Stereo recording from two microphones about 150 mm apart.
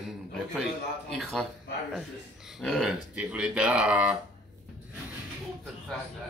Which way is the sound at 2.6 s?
Centre (ahead or behind).